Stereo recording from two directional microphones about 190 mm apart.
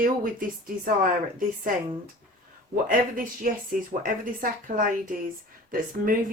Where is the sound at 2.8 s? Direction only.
45° right (ahead or behind).